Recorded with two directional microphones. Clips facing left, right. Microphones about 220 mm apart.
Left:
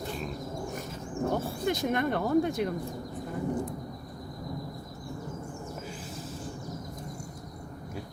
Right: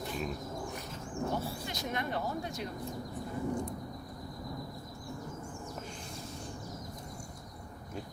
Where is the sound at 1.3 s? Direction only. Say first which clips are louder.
Left 7 dB; 50° left (ahead or behind).